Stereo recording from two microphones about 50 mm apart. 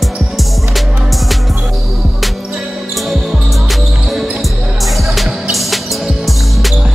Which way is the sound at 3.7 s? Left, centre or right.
Centre.